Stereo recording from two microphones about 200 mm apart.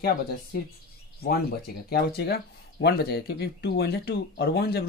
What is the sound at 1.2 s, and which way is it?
Speech, 50° left (ahead or behind).